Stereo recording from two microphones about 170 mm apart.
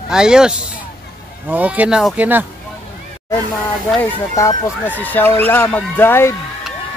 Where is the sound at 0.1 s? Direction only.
5° right (ahead or behind).